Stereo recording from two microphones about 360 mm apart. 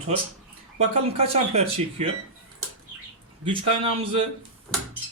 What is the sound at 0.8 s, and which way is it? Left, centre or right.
Speech, centre.